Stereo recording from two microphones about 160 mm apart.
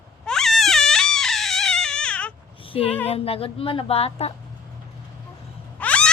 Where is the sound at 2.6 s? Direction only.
35° left (ahead or behind).